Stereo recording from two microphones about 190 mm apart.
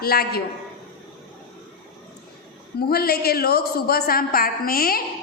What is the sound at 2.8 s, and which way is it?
A man's voice, 55° left (ahead or behind).